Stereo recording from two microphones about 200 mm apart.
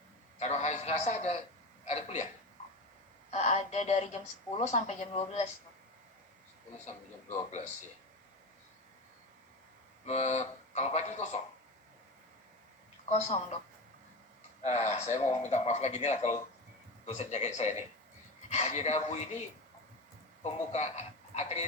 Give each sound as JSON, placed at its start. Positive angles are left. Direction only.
{"t": 0.3, "sound": "a sound", "side_deg": 35}
{"t": 3.3, "sound": "a sound", "side_deg": 35}
{"t": 4.5, "sound": "speech", "side_deg": 35}
{"t": 6.8, "sound": "speech", "side_deg": 35}
{"t": 10.1, "sound": "speech", "side_deg": 35}
{"t": 13.1, "sound": "speech", "side_deg": 35}
{"t": 14.6, "sound": "speech", "side_deg": 35}
{"t": 20.4, "sound": "speech", "side_deg": 35}